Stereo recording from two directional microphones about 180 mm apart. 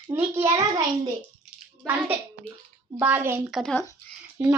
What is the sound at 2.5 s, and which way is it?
Speech, 5° left (ahead or behind).